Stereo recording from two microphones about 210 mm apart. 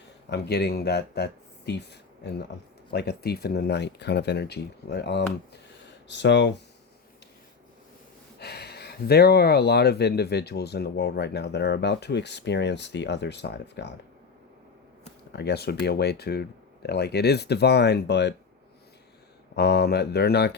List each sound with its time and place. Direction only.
0.3 s speech: 50° left (ahead or behind)
8.4 s speech: 50° left (ahead or behind)
15.3 s speech: 50° left (ahead or behind)
19.5 s speech: 50° left (ahead or behind)